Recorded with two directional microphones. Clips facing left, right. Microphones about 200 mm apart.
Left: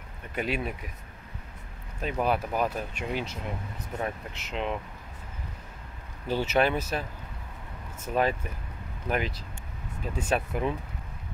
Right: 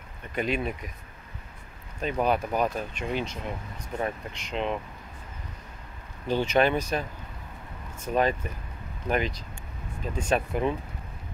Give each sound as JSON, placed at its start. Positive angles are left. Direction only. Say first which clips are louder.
{"t": 0.3, "sound": "speech", "louder": "right 2 dB", "side_deg": 5}
{"t": 2.0, "sound": "speech", "louder": "right 2 dB", "side_deg": 5}
{"t": 6.2, "sound": "speech", "louder": "right 2 dB", "side_deg": 5}